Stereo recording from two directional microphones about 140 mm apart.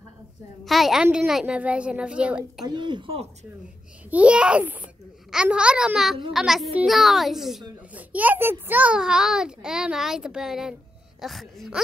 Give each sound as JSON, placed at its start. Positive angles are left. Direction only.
{"t": 0.7, "sound": "a child's voice", "side_deg": 0}
{"t": 2.6, "sound": "speech", "side_deg": -30}
{"t": 4.1, "sound": "a child's voice", "side_deg": -10}